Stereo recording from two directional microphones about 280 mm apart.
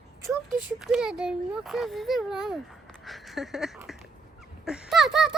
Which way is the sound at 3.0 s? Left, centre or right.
Centre.